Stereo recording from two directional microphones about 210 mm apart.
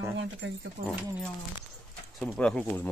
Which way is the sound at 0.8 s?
40° right (ahead or behind).